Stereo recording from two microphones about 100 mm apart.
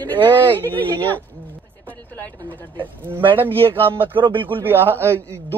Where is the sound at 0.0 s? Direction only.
20° left (ahead or behind).